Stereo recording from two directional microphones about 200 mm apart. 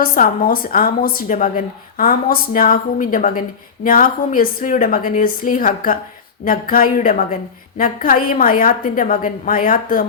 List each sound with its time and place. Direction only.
0.0 s a woman's voice: 45° left (ahead or behind)